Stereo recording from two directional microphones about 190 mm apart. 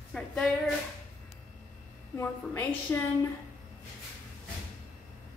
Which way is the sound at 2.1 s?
10° left (ahead or behind).